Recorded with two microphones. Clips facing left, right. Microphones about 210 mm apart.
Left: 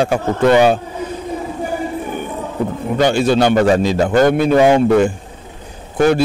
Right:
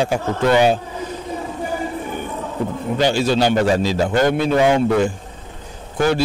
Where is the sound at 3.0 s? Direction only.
55° left (ahead or behind).